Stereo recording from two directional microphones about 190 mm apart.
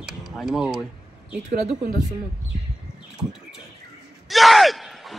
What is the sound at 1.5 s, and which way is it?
Speech, 45° right (ahead or behind).